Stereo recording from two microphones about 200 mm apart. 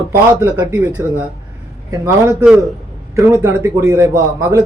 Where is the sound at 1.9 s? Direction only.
15° right (ahead or behind).